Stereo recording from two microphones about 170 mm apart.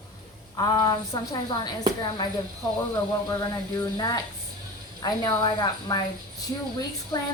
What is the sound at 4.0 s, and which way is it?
A woman's voice, 20° left (ahead or behind).